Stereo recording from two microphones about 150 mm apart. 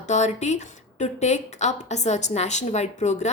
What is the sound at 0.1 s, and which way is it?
Speech, 50° left (ahead or behind).